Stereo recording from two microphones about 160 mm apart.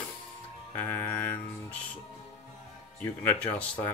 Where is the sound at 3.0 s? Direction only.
10° left (ahead or behind).